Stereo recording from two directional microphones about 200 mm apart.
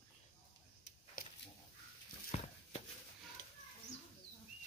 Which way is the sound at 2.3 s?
35° left (ahead or behind).